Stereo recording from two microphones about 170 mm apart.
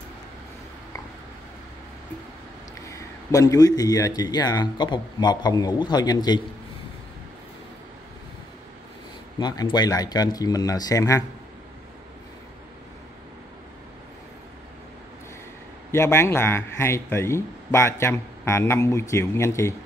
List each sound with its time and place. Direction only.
2.9 s a man's voice: 20° left (ahead or behind)
9.4 s a man's voice: 25° left (ahead or behind)
15.9 s a man's voice: 15° left (ahead or behind)